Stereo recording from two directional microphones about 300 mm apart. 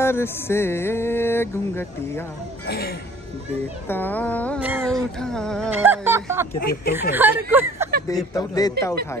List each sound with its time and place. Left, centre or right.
0.0 s music: centre
2.6 s speech: left
3.9 s speech: centre
4.6 s speech: centre
6.6 s speech: left
7.0 s speech: centre
8.4 s music: centre